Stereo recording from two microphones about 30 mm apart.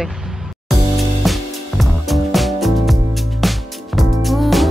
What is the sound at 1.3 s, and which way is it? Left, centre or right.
Music, centre.